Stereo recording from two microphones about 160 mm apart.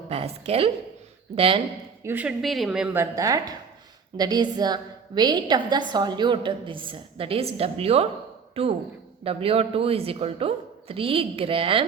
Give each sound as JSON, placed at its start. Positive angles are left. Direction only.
{"t": 0.1, "sound": "speech", "side_deg": -40}
{"t": 2.0, "sound": "speech", "side_deg": -10}
{"t": 2.4, "sound": "a woman's voice", "side_deg": 0}
{"t": 3.0, "sound": "a woman's voice", "side_deg": -20}